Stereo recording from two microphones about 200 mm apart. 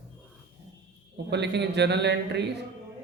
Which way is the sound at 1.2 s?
60° right (ahead or behind).